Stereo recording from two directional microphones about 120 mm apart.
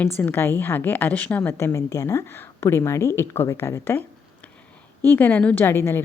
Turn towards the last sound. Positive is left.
turn(degrees=20)  # may be behind; listen again after turning